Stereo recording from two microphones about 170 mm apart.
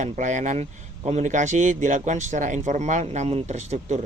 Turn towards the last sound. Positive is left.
turn(degrees=-40)  # may be behind; listen again after turning